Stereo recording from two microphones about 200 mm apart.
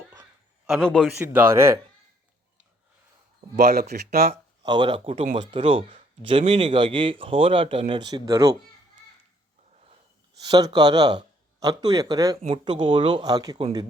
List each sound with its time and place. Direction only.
0.7 s a man's voice: 5° left (ahead or behind)
1.2 s speech: 10° right (ahead or behind)
3.5 s speech: 50° right (ahead or behind)
4.6 s speech: 20° right (ahead or behind)
10.4 s speech: 20° right (ahead or behind)
12.4 s speech: 35° right (ahead or behind); by 13.7 s 20° right (ahead or behind)